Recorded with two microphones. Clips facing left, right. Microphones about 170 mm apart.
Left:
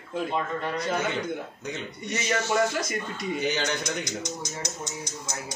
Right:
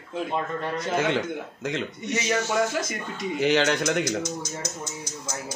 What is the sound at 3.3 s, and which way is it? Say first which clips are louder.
Speech: right 8 dB; 90° right.